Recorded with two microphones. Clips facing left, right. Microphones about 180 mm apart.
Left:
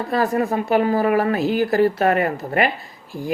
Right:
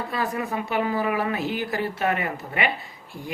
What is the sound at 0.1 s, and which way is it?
A woman's voice, 40° left (ahead or behind).